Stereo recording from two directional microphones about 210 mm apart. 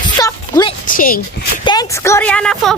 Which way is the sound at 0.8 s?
40° left (ahead or behind).